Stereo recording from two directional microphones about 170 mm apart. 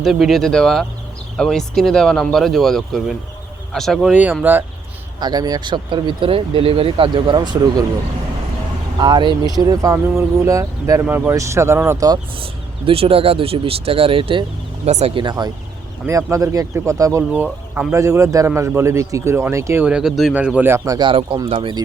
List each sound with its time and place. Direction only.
0.0 s speech: centre (ahead or behind)
4.1 s speech: 10° right (ahead or behind)
5.2 s speech: 25° right (ahead or behind)
9.0 s speech: 25° right (ahead or behind)
14.8 s speech: 40° right (ahead or behind)
15.1 s speech: 25° right (ahead or behind)